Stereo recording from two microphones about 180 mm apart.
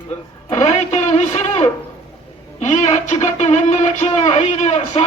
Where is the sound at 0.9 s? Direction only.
40° left (ahead or behind).